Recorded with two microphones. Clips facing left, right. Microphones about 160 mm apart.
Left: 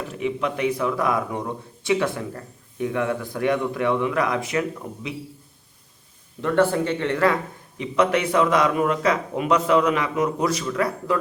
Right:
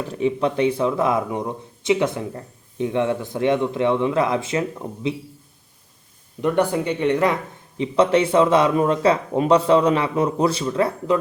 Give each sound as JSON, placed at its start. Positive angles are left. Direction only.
{"t": 0.1, "sound": "speech", "side_deg": -30}
{"t": 6.4, "sound": "speech", "side_deg": -15}
{"t": 7.8, "sound": "speech", "side_deg": -30}